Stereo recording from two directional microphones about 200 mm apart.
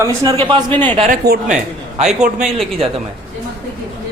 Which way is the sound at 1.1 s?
40° right (ahead or behind).